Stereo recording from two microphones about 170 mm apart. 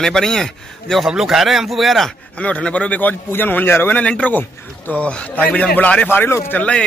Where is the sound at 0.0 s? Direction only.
5° left (ahead or behind).